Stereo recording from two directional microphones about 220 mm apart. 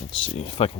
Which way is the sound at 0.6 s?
25° left (ahead or behind).